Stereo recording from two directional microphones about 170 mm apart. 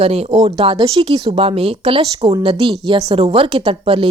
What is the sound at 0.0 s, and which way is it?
A woman's voice, 40° right (ahead or behind).